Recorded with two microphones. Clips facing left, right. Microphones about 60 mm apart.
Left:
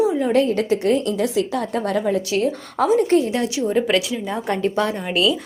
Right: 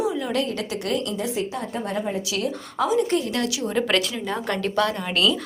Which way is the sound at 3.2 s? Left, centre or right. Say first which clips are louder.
Left 4 dB; left.